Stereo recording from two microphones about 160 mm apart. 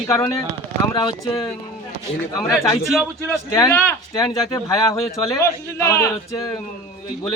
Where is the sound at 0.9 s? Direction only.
30° left (ahead or behind).